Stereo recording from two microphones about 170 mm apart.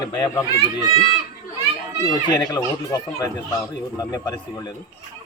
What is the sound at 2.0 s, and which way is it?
Speech, 20° left (ahead or behind).